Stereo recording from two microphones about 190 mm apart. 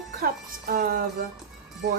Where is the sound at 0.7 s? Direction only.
50° right (ahead or behind).